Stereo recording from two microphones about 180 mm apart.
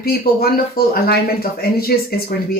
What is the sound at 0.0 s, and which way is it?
Speech, 55° left (ahead or behind).